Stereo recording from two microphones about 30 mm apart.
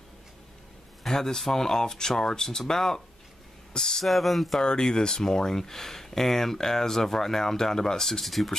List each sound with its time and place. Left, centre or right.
1.0 s speech: centre
4.0 s speech: centre
4.6 s speech: centre